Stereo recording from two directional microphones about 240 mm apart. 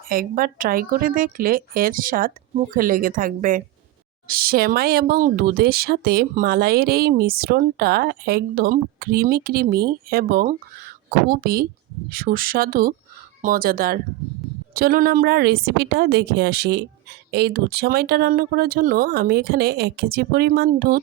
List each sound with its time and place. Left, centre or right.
0.1 s a woman's voice: right